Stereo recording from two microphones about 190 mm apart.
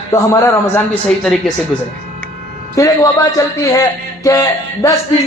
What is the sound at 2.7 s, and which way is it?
A man's voice, 15° left (ahead or behind).